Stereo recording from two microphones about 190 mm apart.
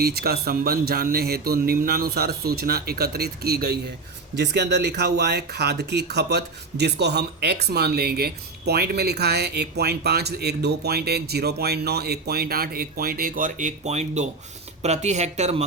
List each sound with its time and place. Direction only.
0.0 s speech: 55° right (ahead or behind); by 15.6 s 35° right (ahead or behind)